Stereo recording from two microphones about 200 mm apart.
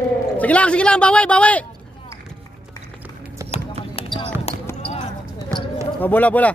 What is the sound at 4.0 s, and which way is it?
Basketball bounce, 30° left (ahead or behind).